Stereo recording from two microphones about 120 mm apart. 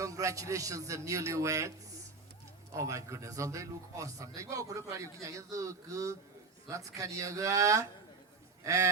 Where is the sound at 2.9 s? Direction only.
25° right (ahead or behind).